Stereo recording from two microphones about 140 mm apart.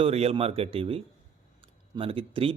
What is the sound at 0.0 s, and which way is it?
Speech, 45° right (ahead or behind).